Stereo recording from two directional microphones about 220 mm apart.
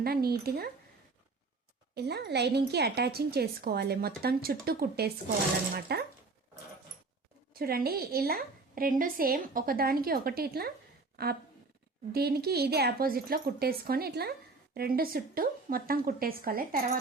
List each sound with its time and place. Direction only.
0.0 s speech: 45° right (ahead or behind)
2.0 s speech: 45° right (ahead or behind)
7.5 s a woman's voice: 45° right (ahead or behind)